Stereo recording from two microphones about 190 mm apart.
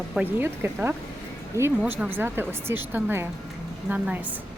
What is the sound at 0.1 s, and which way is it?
Speech, 10° right (ahead or behind).